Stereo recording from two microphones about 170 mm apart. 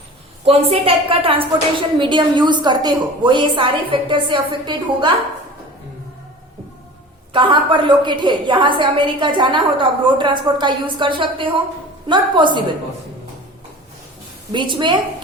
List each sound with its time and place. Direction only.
0.4 s a woman's voice: 35° right (ahead or behind)
7.3 s a woman's voice: 30° right (ahead or behind)
14.5 s a woman's voice: 25° right (ahead or behind)